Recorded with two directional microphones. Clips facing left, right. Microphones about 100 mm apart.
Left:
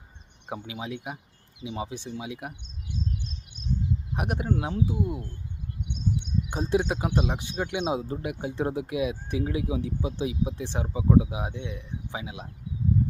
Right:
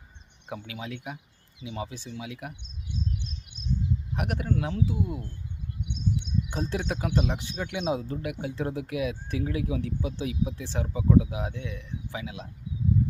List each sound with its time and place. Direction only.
0.7 s speech: 20° left (ahead or behind)
4.1 s speech: 20° left (ahead or behind)